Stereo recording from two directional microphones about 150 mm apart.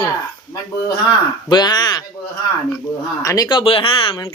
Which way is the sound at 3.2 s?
25° left (ahead or behind).